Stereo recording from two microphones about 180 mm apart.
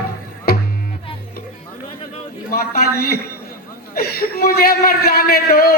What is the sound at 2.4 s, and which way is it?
A man's voice, 55° left (ahead or behind).